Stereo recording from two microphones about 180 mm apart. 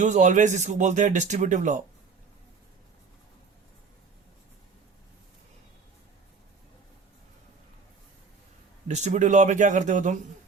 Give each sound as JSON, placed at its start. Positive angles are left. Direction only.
{"t": 0.0, "sound": "speech", "side_deg": -40}
{"t": 8.9, "sound": "speech", "side_deg": -40}